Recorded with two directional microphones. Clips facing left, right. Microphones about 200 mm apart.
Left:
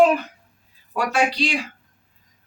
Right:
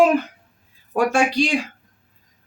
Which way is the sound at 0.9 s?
45° right (ahead or behind).